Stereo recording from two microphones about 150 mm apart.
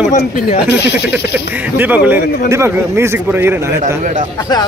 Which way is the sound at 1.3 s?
10° right (ahead or behind).